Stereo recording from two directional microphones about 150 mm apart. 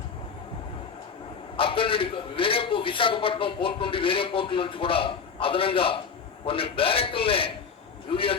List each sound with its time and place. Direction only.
1.5 s a man's voice: 35° left (ahead or behind)